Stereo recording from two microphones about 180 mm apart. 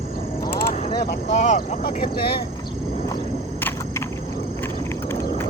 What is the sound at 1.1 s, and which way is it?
Speech, 40° left (ahead or behind).